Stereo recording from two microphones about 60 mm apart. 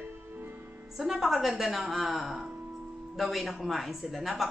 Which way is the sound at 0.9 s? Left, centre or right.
Centre.